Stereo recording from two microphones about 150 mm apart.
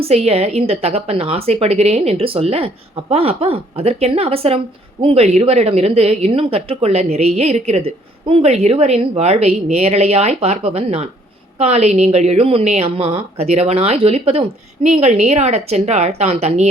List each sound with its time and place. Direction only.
0.0 s a woman's voice: 40° right (ahead or behind)